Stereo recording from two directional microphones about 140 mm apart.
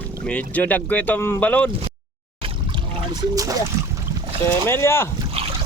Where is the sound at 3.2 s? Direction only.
25° right (ahead or behind).